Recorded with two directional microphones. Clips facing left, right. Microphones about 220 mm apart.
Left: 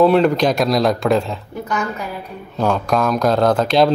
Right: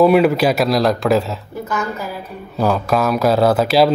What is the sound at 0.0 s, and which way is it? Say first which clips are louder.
Speech: right 1 dB; 10° right (ahead or behind).